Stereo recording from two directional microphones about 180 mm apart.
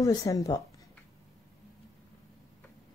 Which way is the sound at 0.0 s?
20° left (ahead or behind).